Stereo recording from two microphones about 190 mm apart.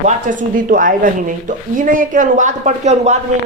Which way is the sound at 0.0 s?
40° right (ahead or behind).